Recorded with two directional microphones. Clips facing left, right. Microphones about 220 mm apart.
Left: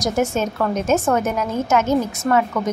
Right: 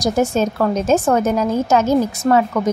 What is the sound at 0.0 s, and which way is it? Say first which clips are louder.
A woman's voice: right 3 dB; 35° right (ahead or behind).